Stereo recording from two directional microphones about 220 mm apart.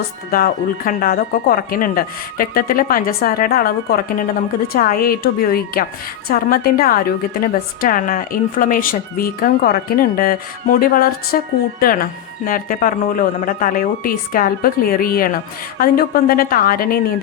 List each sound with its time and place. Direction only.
0.3 s a woman's voice: 40° left (ahead or behind)